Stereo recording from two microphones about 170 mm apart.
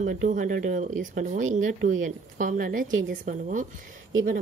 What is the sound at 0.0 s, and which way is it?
A woman's voice, 45° right (ahead or behind).